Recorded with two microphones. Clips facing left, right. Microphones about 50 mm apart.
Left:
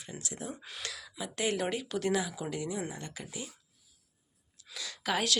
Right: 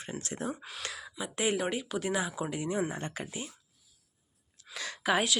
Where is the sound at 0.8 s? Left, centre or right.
Right; by 2.1 s centre.